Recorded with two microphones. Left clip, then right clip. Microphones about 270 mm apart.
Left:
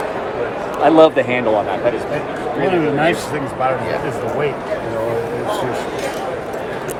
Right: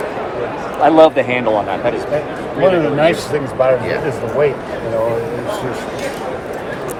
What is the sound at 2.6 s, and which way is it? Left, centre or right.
Speech, centre.